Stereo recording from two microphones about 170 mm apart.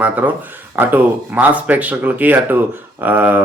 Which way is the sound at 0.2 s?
10° right (ahead or behind).